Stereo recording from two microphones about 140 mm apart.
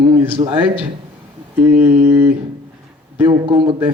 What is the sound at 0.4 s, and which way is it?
Speech, 40° right (ahead or behind).